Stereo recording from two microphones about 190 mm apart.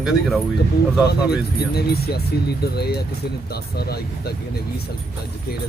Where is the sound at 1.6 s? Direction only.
55° left (ahead or behind).